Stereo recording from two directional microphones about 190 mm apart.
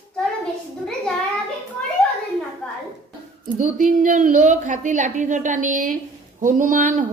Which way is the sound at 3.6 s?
45° right (ahead or behind).